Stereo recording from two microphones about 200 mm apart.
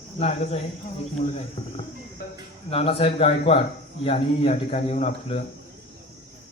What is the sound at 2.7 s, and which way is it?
Speech, 30° left (ahead or behind).